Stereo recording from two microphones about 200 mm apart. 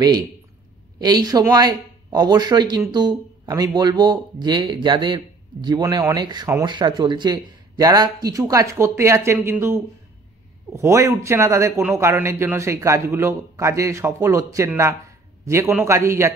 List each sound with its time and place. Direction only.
0.9 s a man's voice: 20° right (ahead or behind)